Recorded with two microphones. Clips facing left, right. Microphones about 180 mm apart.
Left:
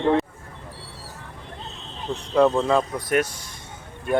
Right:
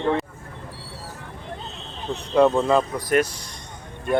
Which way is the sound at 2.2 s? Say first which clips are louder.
Right 1 dB; centre (ahead or behind).